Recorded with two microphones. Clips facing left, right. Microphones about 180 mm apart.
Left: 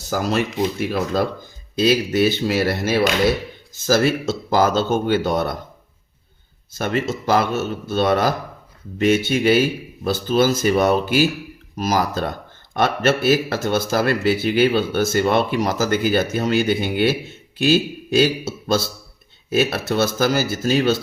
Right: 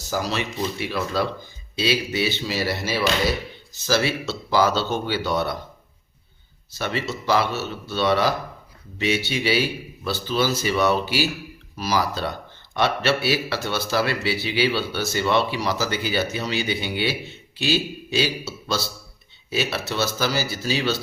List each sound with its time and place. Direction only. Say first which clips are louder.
0.1 s speech: left 5 dB; 50° left (ahead or behind)
6.7 s speech: left 5 dB; 50° left (ahead or behind)